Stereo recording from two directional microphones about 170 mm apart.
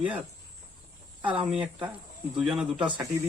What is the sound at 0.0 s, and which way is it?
Speech, 5° right (ahead or behind).